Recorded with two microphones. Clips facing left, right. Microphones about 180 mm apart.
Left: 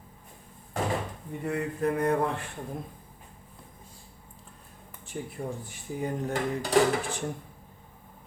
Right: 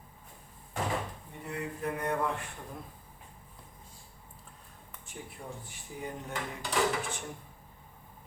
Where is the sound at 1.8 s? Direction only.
40° left (ahead or behind).